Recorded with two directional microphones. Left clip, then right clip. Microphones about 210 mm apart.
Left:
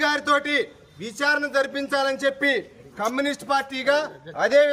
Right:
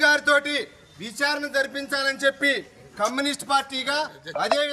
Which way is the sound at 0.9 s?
5° left (ahead or behind).